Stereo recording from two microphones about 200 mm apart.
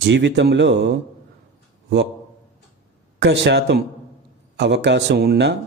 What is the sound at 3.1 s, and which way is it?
A man's voice, 60° right (ahead or behind).